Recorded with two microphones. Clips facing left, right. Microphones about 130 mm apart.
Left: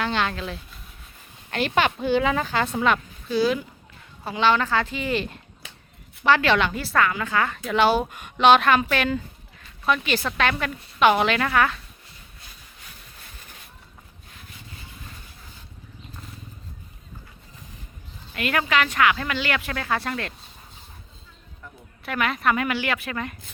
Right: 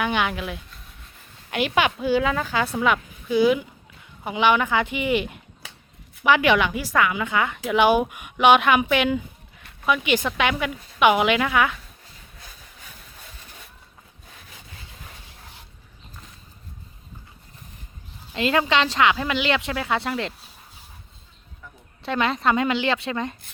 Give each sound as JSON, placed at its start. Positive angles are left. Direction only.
{"t": 0.0, "sound": "speech", "side_deg": -15}
{"t": 18.3, "sound": "a woman's voice", "side_deg": -25}
{"t": 22.0, "sound": "a woman's voice", "side_deg": -30}